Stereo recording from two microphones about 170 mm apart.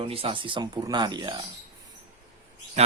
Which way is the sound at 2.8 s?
40° right (ahead or behind).